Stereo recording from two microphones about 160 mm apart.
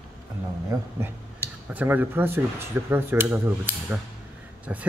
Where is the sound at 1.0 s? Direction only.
10° right (ahead or behind).